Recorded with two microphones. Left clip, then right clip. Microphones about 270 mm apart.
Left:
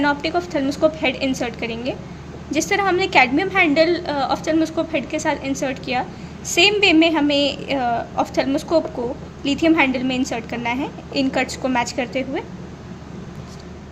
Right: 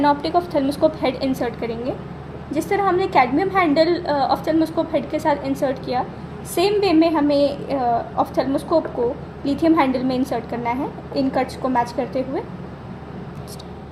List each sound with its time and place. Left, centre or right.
0.0 s a woman's voice: centre